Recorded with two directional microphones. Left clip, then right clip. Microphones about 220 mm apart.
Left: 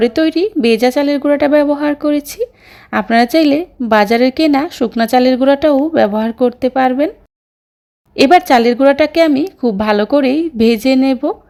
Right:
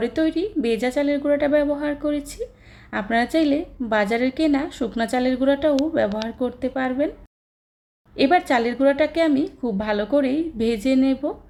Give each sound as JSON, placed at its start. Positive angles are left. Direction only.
{"t": 0.0, "sound": "speech", "side_deg": 35}
{"t": 8.1, "sound": "speech", "side_deg": 40}